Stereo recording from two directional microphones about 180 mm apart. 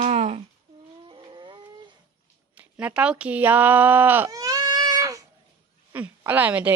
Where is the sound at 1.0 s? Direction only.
25° right (ahead or behind).